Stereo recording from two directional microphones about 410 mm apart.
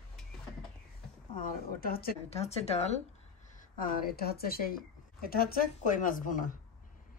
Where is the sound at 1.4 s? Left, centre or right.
Left.